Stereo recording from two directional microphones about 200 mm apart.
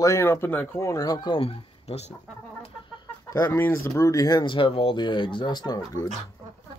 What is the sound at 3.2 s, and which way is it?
Speech, 15° left (ahead or behind).